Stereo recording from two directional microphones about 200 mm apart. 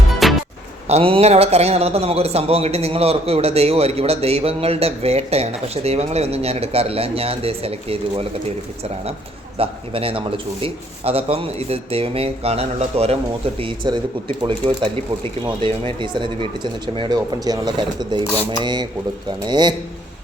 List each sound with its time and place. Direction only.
0.2 s music: centre (ahead or behind)
0.9 s a man's voice: 30° right (ahead or behind)